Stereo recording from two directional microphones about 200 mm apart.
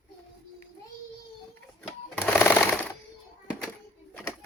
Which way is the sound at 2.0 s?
10° left (ahead or behind).